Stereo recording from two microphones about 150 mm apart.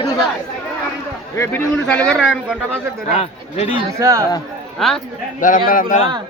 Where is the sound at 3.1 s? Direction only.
45° left (ahead or behind).